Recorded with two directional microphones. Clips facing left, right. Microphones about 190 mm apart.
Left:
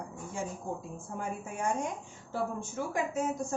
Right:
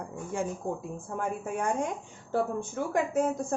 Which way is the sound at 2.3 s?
60° right (ahead or behind).